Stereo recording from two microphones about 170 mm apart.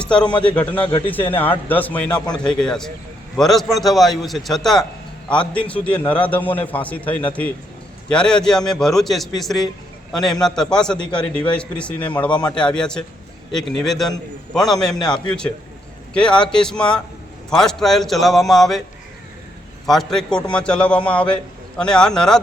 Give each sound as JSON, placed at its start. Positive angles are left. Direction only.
{"t": 0.0, "sound": "a man's voice", "side_deg": 5}
{"t": 0.9, "sound": "a man's voice", "side_deg": 25}
{"t": 1.6, "sound": "a man's voice", "side_deg": 10}
{"t": 2.2, "sound": "a man's voice", "side_deg": 25}
{"t": 2.6, "sound": "a man's voice", "side_deg": 5}
{"t": 19.8, "sound": "a man's voice", "side_deg": 0}